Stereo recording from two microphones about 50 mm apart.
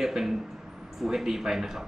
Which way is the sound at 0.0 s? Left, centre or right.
Centre.